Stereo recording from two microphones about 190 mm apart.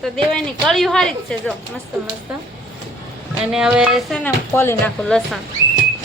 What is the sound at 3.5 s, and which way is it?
A woman's voice, 5° right (ahead or behind).